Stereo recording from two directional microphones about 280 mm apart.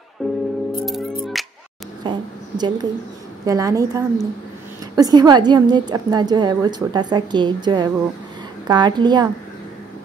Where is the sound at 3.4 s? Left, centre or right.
Centre.